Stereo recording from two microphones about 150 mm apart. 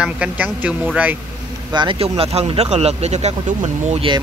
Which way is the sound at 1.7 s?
35° right (ahead or behind).